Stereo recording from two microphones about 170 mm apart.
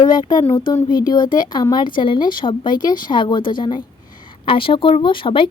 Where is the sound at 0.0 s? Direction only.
25° left (ahead or behind).